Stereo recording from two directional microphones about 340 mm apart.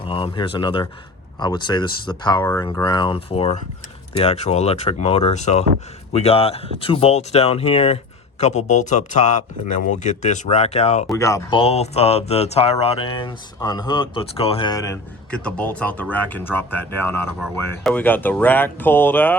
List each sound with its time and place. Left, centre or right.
0.0 s speech: centre